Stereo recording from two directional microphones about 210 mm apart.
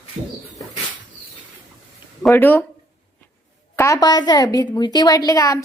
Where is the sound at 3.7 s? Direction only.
15° left (ahead or behind).